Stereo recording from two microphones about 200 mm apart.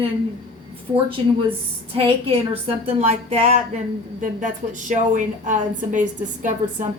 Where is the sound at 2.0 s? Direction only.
30° right (ahead or behind).